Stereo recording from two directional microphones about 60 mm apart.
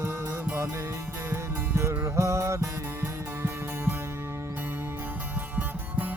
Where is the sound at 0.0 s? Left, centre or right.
Right.